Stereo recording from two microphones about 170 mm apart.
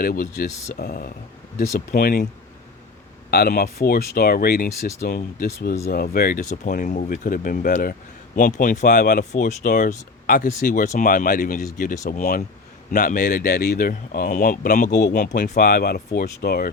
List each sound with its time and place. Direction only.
0.0 s speech: 60° left (ahead or behind)
3.2 s speech: 65° left (ahead or behind); by 15.6 s 50° left (ahead or behind)
15.6 s speech: 65° left (ahead or behind)
16.0 s speech: 45° left (ahead or behind)
16.4 s speech: 65° left (ahead or behind)